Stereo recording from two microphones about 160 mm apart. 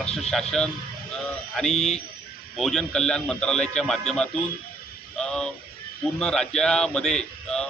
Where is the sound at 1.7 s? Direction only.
45° left (ahead or behind).